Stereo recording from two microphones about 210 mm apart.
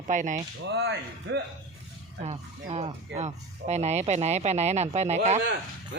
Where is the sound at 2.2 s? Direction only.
30° right (ahead or behind).